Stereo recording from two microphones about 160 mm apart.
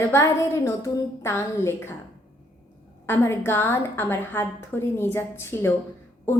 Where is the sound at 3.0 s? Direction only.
15° left (ahead or behind).